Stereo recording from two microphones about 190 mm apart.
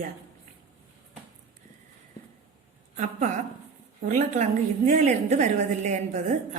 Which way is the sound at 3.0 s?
40° right (ahead or behind).